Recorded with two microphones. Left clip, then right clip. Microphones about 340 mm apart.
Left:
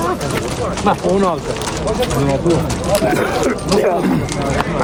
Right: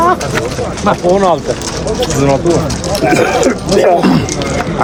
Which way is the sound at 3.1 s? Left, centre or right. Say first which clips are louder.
Right 6 dB; right.